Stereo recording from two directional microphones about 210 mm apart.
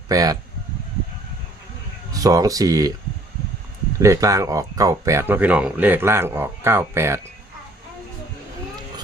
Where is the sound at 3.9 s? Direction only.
15° right (ahead or behind).